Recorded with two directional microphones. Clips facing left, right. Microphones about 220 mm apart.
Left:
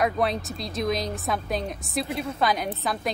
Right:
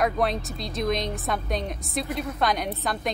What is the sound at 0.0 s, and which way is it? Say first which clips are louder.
A woman's voice: even; centre (ahead or behind).